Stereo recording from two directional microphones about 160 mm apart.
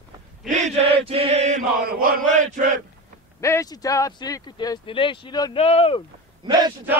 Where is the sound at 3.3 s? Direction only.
20° left (ahead or behind).